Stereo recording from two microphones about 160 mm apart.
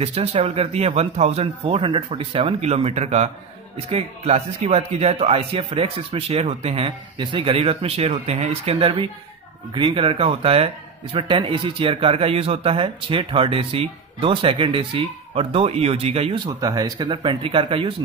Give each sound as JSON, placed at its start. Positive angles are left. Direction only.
{"t": 0.0, "sound": "speech", "side_deg": -40}